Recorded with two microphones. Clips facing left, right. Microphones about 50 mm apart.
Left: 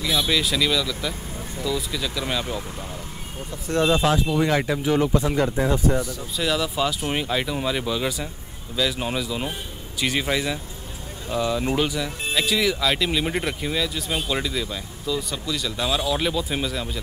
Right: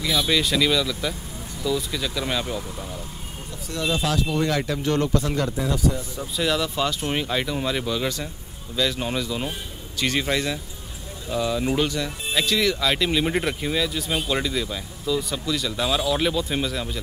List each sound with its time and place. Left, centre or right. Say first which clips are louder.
0.0 s speech: even; centre
3.6 s speech: left 5 dB; left
4.3 s speech: left 2 dB; centre
5.6 s speech: left 3 dB; left
6.3 s speech: even; centre